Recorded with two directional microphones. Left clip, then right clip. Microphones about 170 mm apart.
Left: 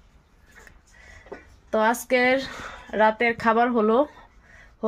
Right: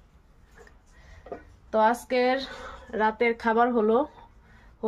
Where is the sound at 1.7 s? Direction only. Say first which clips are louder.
Left 1 dB; 35° left (ahead or behind).